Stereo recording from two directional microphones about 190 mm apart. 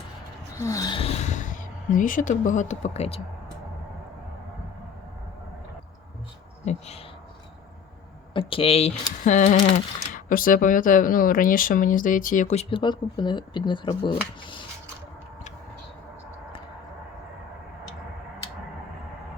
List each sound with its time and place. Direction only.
0.5 s gasp: 15° left (ahead or behind); by 1.5 s 40° left (ahead or behind)
1.9 s speech: 45° left (ahead or behind)
6.7 s speech: 35° left (ahead or behind)
8.3 s speech: 30° left (ahead or behind)